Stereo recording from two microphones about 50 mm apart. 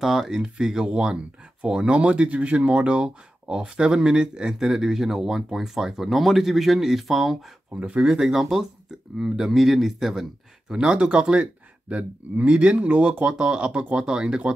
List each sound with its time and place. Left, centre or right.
0.0 s speech: centre
7.7 s speech: right; by 10.2 s centre
10.7 s speech: centre